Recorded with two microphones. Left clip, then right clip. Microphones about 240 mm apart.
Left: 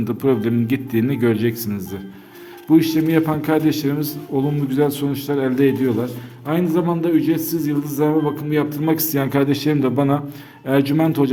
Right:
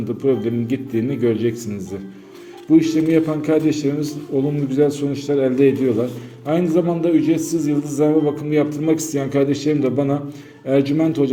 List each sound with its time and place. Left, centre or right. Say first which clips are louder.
0.2 s a man's voice: even; left